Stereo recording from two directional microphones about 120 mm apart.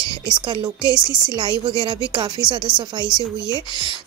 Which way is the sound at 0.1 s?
40° right (ahead or behind).